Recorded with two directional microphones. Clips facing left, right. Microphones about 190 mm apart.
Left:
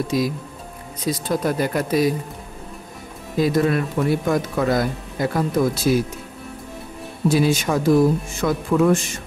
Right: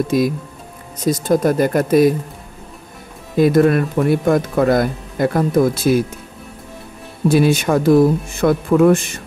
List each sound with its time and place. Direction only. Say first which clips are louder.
0.1 s speech: right 5 dB; 55° right (ahead or behind)
3.3 s speech: right 6 dB; 55° right (ahead or behind)
7.2 s speech: right 4 dB; 60° right (ahead or behind)